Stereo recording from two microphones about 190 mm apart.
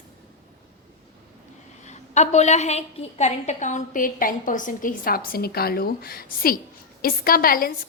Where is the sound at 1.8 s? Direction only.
35° left (ahead or behind).